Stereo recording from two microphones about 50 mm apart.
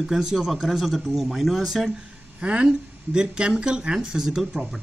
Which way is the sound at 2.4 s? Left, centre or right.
Right.